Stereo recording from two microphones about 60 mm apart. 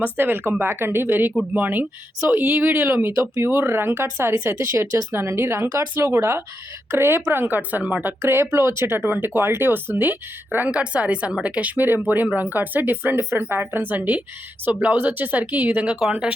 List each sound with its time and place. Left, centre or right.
0.0 s speech: right
3.2 s speech: right
3.5 s speech: right
8.2 s speech: right
10.7 s speech: right
15.9 s speech: centre